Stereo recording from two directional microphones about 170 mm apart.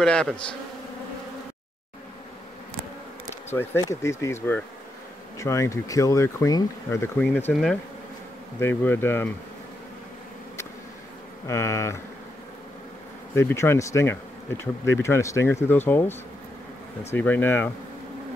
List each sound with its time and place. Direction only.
0.0 s speech: 5° left (ahead or behind)
3.4 s speech: 15° left (ahead or behind)
8.5 s speech: 15° left (ahead or behind)
11.4 s speech: 15° left (ahead or behind)
13.3 s speech: 15° left (ahead or behind)